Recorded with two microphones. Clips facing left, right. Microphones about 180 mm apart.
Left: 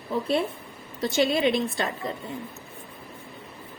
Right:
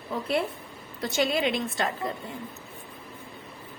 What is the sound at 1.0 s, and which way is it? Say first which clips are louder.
Speech: left 3 dB; 25° left (ahead or behind).